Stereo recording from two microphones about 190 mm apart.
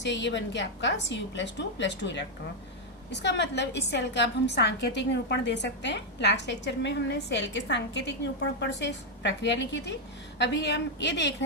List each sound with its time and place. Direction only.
0.0 s a woman's voice: 65° left (ahead or behind)